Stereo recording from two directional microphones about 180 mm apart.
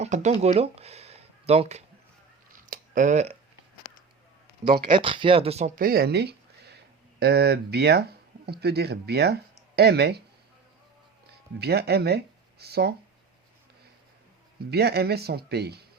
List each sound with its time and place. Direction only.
0.0 s speech: 40° right (ahead or behind)
2.5 s a sound: 50° right (ahead or behind)
4.6 s speech: 55° right (ahead or behind)
4.9 s speech: 30° right (ahead or behind); by 10.2 s 65° right (ahead or behind)
11.6 s speech: 65° right (ahead or behind)
14.7 s speech: 65° right (ahead or behind)